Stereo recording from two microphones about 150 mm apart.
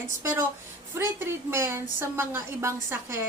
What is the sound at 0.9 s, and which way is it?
A woman's voice, 15° right (ahead or behind).